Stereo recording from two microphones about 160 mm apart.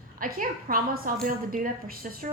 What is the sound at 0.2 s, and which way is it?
A woman's voice, 60° right (ahead or behind).